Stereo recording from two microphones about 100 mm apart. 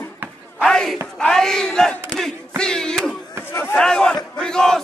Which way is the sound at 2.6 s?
5° left (ahead or behind).